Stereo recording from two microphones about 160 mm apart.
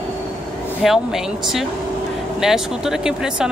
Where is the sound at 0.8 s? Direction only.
Centre (ahead or behind).